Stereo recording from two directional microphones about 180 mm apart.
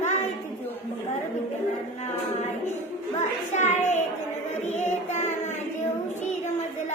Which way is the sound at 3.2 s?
40° left (ahead or behind).